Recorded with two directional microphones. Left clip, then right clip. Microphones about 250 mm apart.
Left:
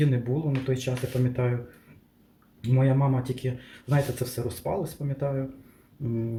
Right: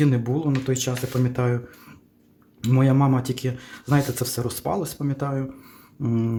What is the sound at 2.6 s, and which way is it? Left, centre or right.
Speech, right.